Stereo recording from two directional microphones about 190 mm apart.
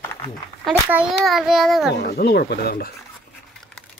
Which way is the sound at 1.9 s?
60° left (ahead or behind).